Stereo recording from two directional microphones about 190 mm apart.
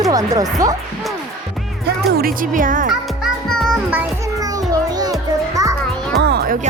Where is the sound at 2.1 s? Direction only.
50° right (ahead or behind).